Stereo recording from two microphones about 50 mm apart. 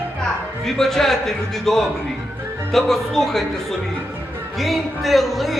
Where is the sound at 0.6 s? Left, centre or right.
Centre.